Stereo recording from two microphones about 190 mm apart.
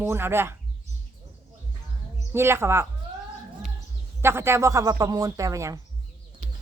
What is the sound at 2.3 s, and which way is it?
Speech, 10° right (ahead or behind).